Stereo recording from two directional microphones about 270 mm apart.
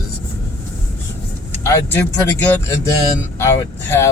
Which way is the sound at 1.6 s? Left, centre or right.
Centre.